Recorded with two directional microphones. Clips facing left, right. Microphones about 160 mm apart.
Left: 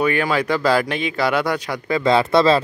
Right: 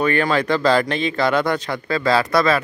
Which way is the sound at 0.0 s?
10° left (ahead or behind).